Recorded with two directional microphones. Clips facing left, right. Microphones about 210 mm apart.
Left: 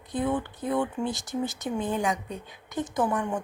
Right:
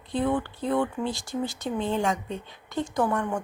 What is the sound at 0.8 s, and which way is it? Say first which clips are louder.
A woman's voice: right 1 dB; 20° left (ahead or behind).